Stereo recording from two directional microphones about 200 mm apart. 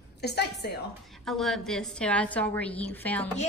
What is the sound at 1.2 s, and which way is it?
A woman's voice, centre (ahead or behind).